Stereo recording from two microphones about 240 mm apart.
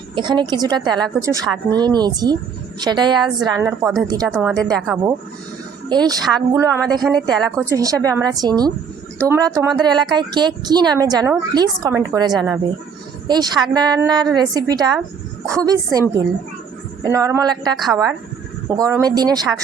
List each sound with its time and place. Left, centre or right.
0.2 s a woman's voice: centre
3.7 s speech: centre
4.1 s a woman's voice: centre
4.4 s speech: centre
5.9 s a woman's voice: centre
7.0 s speech: centre
7.5 s a woman's voice: centre